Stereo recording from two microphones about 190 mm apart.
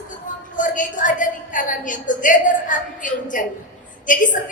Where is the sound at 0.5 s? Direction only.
40° left (ahead or behind).